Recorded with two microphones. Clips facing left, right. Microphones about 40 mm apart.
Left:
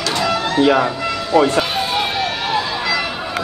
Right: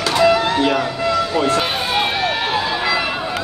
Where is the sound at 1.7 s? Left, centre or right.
Centre.